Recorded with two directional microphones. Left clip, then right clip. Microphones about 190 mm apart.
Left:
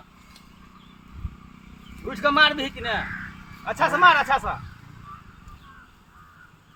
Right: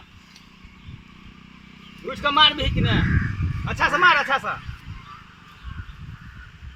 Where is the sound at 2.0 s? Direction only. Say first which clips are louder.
Right 2 dB; 10° left (ahead or behind).